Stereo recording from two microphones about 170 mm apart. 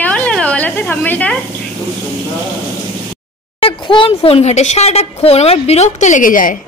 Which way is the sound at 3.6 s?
30° left (ahead or behind).